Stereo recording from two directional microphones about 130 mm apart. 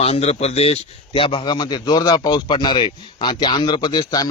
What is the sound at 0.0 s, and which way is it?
A man's voice, 50° left (ahead or behind).